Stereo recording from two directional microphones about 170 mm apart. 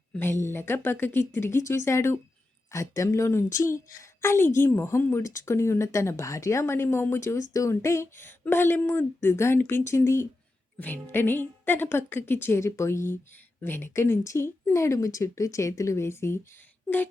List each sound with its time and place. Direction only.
0.1 s speech: 10° left (ahead or behind)